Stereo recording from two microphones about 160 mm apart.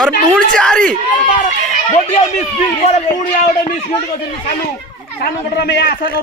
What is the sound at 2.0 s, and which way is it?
A man's voice, 45° left (ahead or behind).